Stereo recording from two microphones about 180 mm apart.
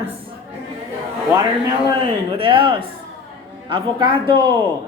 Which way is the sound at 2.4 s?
30° right (ahead or behind).